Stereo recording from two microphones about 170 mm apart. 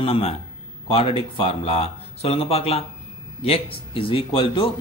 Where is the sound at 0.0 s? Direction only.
35° left (ahead or behind).